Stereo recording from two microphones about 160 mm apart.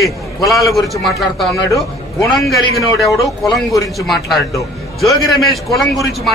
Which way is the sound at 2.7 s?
Centre (ahead or behind).